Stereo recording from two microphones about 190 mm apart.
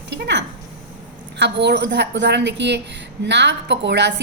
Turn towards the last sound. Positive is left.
turn(degrees=-65)  # may be behind; listen again after turning